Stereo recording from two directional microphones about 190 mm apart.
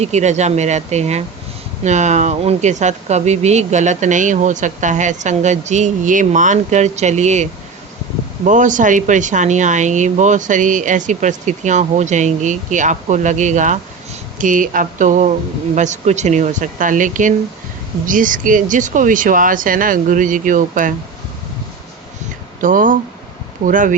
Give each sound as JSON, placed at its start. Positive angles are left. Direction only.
{"t": 0.0, "sound": "speech", "side_deg": -35}
{"t": 8.4, "sound": "speech", "side_deg": -40}
{"t": 22.6, "sound": "speech", "side_deg": -45}